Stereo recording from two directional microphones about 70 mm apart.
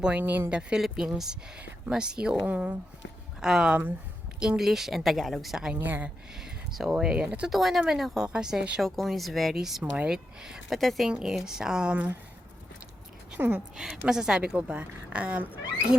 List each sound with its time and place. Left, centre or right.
0.2 s speech: right
0.8 s a woman's voice: centre; by 2.7 s right
3.4 s a woman's voice: centre
5.8 s speech: right
6.4 s speech: centre
7.5 s a woman's voice: centre
10.8 s a woman's voice: centre
13.4 s speech: right
13.7 s a woman's voice: centre